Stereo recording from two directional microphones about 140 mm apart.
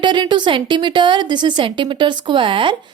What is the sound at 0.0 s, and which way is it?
A woman's voice, 35° right (ahead or behind).